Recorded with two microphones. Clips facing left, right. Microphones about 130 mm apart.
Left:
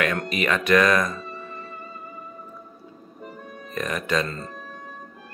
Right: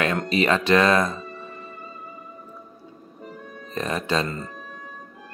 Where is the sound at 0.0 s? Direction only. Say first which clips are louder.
Right 2 dB; 30° right (ahead or behind).